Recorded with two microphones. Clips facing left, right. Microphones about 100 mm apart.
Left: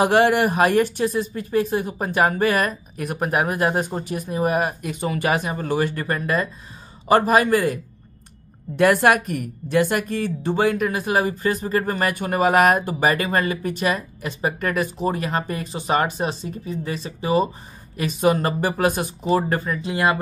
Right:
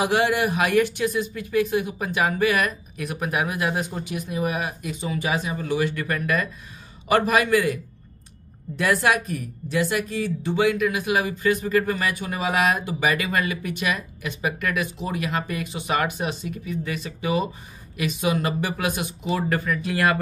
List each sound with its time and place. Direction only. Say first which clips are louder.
0.0 s a woman's voice: left 5 dB; 45° left (ahead or behind)
8.7 s a woman's voice: left 5 dB; 55° left (ahead or behind); by 20.2 s 25° left (ahead or behind)